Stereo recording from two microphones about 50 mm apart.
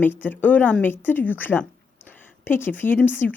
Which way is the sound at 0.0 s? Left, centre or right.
Left.